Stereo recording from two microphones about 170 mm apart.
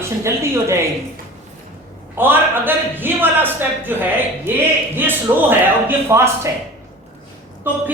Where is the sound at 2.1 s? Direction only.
10° right (ahead or behind).